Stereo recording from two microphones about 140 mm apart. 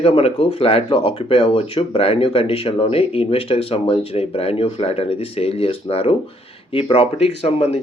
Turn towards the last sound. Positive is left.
turn(degrees=45)  # may be behind; listen again after turning